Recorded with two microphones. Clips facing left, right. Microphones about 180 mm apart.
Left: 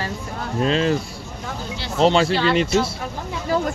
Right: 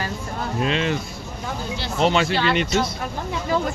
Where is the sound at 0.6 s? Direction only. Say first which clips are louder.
Left 4 dB; 35° left (ahead or behind).